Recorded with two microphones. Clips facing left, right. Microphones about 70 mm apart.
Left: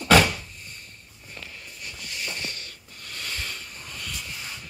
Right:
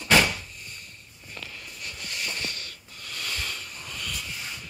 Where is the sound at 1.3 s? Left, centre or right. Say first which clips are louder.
Right 1 dB; left.